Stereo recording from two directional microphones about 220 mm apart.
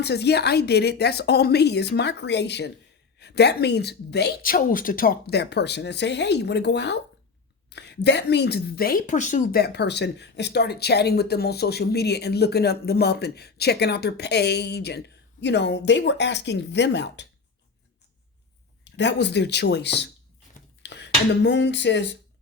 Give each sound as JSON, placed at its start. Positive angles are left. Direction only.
{"t": 0.0, "sound": "a woman's voice", "side_deg": 50}
{"t": 18.9, "sound": "a woman's voice", "side_deg": 50}
{"t": 20.5, "sound": "a sound", "side_deg": 50}